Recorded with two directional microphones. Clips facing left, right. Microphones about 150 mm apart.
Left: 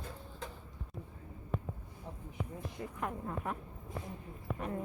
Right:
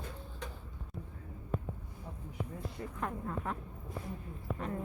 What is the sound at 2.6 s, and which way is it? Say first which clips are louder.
Speech: even; 15° left (ahead or behind).